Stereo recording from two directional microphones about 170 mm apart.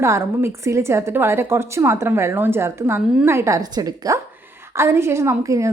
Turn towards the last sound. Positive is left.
turn(degrees=-20)  # may be behind; listen again after turning